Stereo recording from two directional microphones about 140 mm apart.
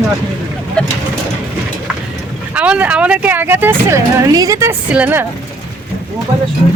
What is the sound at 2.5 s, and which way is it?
Speech, 10° right (ahead or behind).